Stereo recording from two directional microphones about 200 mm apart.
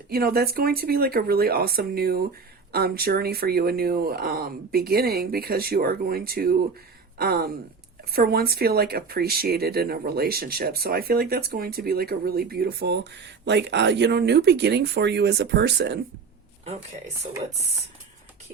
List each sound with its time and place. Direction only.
0.1 s speech: 50° right (ahead or behind)